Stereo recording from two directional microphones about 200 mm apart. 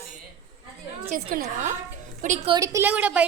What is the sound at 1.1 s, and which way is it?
A woman's voice, 45° right (ahead or behind).